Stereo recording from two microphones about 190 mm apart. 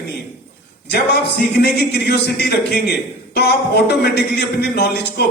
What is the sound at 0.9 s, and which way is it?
A man's voice, 60° left (ahead or behind).